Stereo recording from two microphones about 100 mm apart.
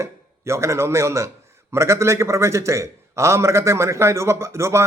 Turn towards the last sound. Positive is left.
turn(degrees=-30)  # may be behind; listen again after turning